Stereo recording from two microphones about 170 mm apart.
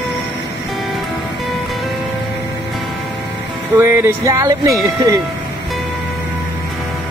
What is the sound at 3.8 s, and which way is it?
Speech, 15° right (ahead or behind).